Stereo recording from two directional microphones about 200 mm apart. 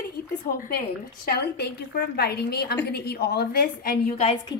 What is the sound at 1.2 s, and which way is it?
A woman's voice, 55° left (ahead or behind).